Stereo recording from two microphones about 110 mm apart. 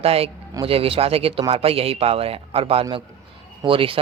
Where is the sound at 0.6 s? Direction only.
60° right (ahead or behind).